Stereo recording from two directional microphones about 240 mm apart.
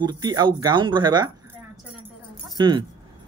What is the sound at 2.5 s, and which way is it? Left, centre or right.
Speech, centre.